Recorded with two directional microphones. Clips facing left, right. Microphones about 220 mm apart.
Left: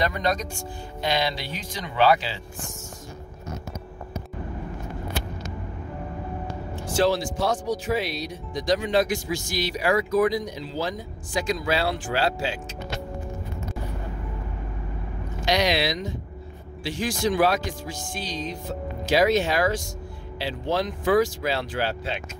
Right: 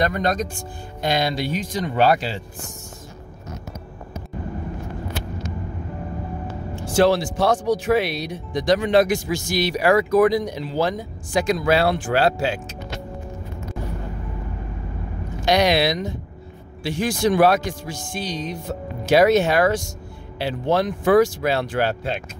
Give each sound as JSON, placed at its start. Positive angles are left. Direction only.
{"t": 0.0, "sound": "speech", "side_deg": -50}
{"t": 7.0, "sound": "speech", "side_deg": -70}
{"t": 15.4, "sound": "speech", "side_deg": -60}
{"t": 19.1, "sound": "speech", "side_deg": -60}